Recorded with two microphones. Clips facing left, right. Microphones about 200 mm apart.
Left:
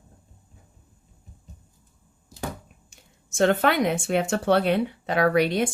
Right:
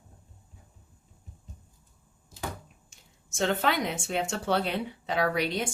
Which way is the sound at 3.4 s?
60° left (ahead or behind).